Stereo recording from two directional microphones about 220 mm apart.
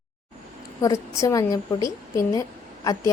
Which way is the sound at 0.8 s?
15° left (ahead or behind).